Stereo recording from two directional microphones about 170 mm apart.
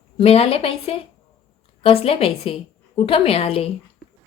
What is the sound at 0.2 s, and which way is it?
A woman's voice, 35° left (ahead or behind).